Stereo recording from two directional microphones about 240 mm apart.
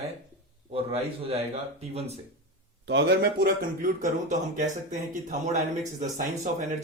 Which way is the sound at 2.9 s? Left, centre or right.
Right.